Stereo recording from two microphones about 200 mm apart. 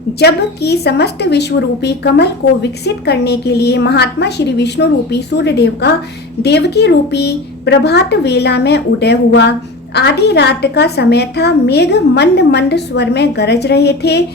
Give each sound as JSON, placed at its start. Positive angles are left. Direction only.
{"t": 0.2, "sound": "a woman's voice", "side_deg": 55}